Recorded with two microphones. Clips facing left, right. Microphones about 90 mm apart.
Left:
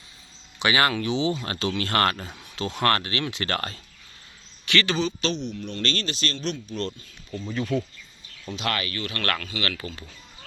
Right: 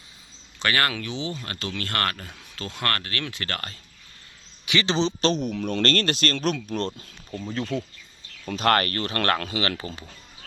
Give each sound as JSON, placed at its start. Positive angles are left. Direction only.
{"t": 0.6, "sound": "speech", "side_deg": 15}
{"t": 1.0, "sound": "speech", "side_deg": 30}
{"t": 3.5, "sound": "speech", "side_deg": 30}
{"t": 4.6, "sound": "speech", "side_deg": -15}
{"t": 5.3, "sound": "speech", "side_deg": -45}
{"t": 7.6, "sound": "speech", "side_deg": 15}
{"t": 8.5, "sound": "speech", "side_deg": -50}